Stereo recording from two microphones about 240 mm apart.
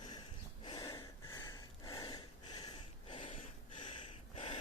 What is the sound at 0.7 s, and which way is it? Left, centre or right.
Gasp, centre.